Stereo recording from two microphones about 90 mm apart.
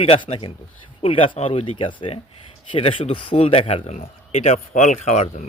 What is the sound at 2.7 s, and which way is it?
Speech, 85° left.